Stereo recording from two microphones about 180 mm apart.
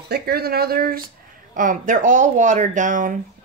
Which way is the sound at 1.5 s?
45° right (ahead or behind).